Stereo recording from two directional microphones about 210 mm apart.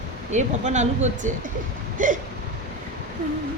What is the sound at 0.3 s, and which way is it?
Speech, 35° right (ahead or behind).